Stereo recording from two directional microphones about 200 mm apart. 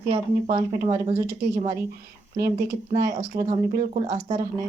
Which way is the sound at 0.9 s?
15° right (ahead or behind).